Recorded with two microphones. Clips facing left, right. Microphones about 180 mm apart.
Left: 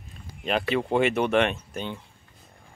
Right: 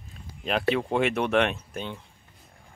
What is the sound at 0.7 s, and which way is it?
Speech, centre (ahead or behind).